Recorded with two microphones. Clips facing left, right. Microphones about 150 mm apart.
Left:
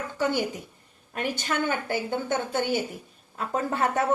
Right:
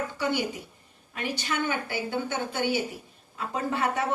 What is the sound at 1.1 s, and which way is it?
Speech, 50° left (ahead or behind).